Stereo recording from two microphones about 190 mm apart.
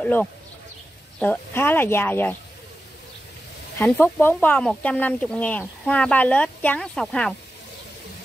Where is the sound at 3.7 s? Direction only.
10° left (ahead or behind).